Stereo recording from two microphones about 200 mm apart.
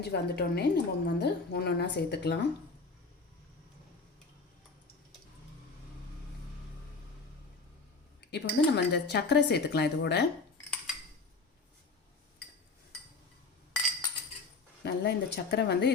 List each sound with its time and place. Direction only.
0.0 s a woman's voice: 55° left (ahead or behind)
8.2 s a woman's voice: 55° left (ahead or behind)
14.8 s a woman's voice: 55° left (ahead or behind)